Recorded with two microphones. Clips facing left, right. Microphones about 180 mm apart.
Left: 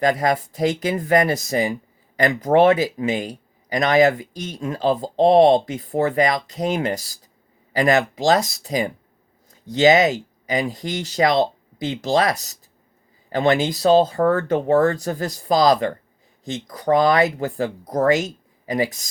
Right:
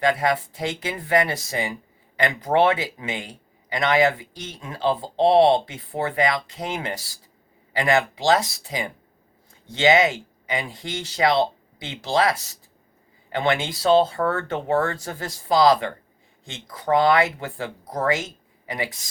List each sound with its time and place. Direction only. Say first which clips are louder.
0.0 s speech: left 2 dB; 40° left (ahead or behind)